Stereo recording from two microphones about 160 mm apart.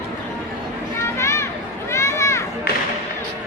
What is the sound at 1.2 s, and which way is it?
Children playing, 15° left (ahead or behind).